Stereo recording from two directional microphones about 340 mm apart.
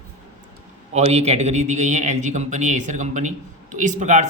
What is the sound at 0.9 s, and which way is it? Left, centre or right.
A man's voice, centre.